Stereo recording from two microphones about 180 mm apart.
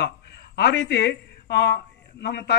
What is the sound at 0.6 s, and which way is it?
A man's voice, 75° left (ahead or behind).